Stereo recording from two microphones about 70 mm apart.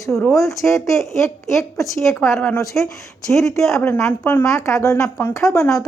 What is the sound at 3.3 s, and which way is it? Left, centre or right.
Speech, left.